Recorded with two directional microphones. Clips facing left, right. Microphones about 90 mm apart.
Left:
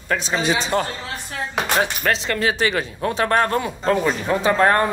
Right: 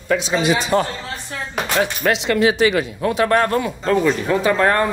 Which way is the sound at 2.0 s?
40° left (ahead or behind).